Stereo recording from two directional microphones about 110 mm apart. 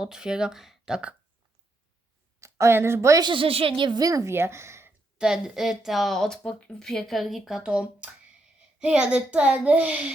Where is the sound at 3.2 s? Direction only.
50° right (ahead or behind); by 4.9 s 25° right (ahead or behind).